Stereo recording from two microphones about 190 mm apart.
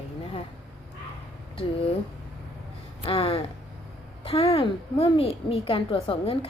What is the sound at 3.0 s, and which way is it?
A woman's voice, 30° left (ahead or behind).